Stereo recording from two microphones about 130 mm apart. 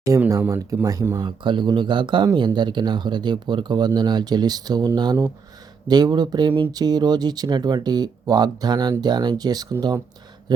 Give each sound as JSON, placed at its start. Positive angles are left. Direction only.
{"t": 0.3, "sound": "speech", "side_deg": -20}
{"t": 1.2, "sound": "speech", "side_deg": -35}
{"t": 5.9, "sound": "speech", "side_deg": -30}